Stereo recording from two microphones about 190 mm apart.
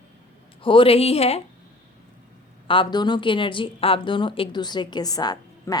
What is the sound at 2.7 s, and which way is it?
Speech, 25° left (ahead or behind).